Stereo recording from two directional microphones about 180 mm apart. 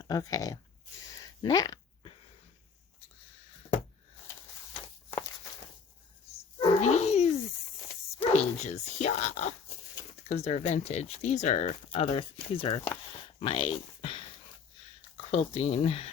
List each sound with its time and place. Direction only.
0.0 s speech: 20° left (ahead or behind)
1.4 s a sound: 20° left (ahead or behind)
6.6 s dog: 40° left (ahead or behind)
8.3 s speech: 40° left (ahead or behind)
15.3 s speech: 35° left (ahead or behind)